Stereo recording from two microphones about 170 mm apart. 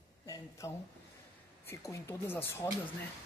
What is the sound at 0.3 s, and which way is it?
A woman's voice, 15° left (ahead or behind).